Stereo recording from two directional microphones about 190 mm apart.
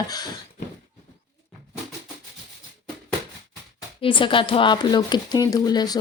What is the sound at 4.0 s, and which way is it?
Speech, 25° left (ahead or behind).